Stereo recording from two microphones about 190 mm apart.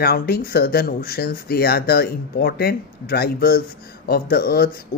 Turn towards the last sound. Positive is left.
turn(degrees=55)  # may be behind; listen again after turning